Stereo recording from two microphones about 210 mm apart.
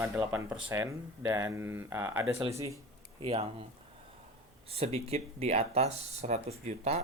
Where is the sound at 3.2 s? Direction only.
25° right (ahead or behind).